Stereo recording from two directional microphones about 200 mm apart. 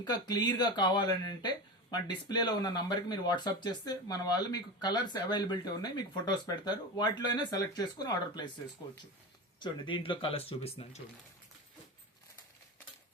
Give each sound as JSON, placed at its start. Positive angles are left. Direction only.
{"t": 0.0, "sound": "speech", "side_deg": 20}
{"t": 9.6, "sound": "speech", "side_deg": 25}